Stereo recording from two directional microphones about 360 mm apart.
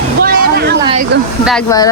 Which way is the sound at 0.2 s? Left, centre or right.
Right.